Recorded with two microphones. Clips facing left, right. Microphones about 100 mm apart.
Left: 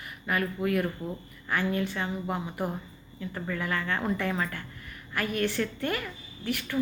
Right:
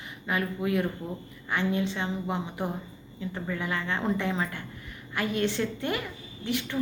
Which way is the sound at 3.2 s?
20° right (ahead or behind).